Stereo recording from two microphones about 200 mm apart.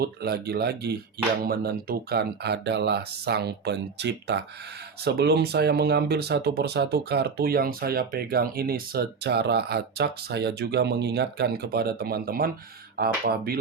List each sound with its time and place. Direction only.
0.0 s speech: 50° right (ahead or behind)